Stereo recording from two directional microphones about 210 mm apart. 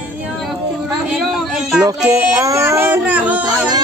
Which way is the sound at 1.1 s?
5° right (ahead or behind).